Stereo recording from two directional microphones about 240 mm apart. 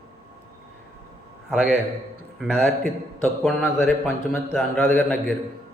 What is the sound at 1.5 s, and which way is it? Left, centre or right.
A man's voice, centre.